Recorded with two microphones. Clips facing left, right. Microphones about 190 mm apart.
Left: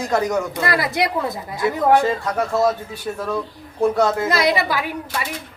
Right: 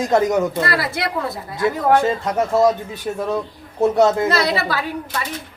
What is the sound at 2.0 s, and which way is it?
Speech, 20° right (ahead or behind).